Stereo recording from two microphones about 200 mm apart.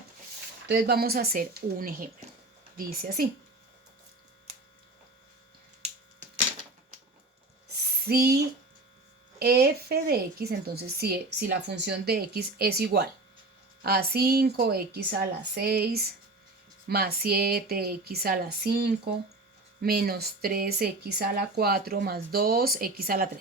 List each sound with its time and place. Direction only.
0.7 s a woman's voice: 55° right (ahead or behind)
8.0 s a woman's voice: 50° right (ahead or behind)
9.4 s a woman's voice: 50° right (ahead or behind)